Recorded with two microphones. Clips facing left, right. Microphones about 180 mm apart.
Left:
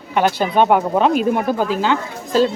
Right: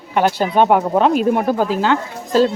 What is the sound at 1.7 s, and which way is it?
Speech, 40° right (ahead or behind).